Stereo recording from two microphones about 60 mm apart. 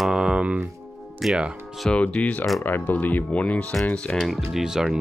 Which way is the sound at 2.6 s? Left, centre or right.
Left.